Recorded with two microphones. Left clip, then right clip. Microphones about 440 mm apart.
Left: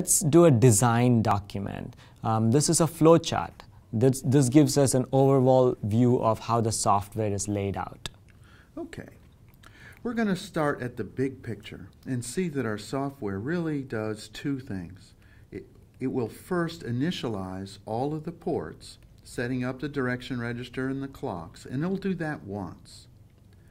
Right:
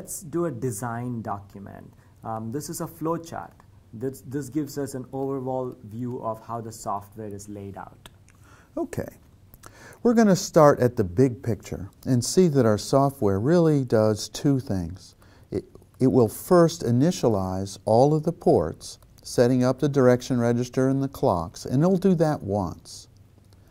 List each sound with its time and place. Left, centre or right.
0.0 s speech: left
8.7 s speech: right
18.8 s speech: right